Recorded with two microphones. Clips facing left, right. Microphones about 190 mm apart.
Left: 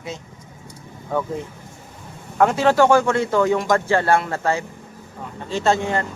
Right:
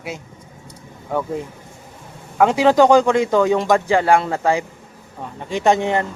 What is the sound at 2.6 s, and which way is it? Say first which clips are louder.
Speech: right 4 dB; 15° right (ahead or behind).